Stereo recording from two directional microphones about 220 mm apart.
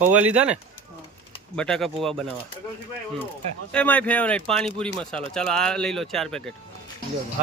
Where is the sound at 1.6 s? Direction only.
5° left (ahead or behind).